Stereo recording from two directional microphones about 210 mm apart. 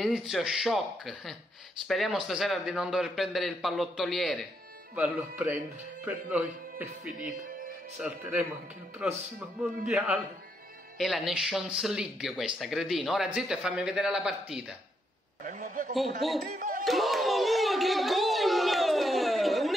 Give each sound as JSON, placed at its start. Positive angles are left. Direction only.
{"t": 0.0, "sound": "speech", "side_deg": 0}
{"t": 8.0, "sound": "speech", "side_deg": -5}
{"t": 15.4, "sound": "a man's voice", "side_deg": -40}
{"t": 15.9, "sound": "speech", "side_deg": 0}
{"t": 16.5, "sound": "a sound", "side_deg": -40}
{"t": 16.8, "sound": "a sound", "side_deg": 0}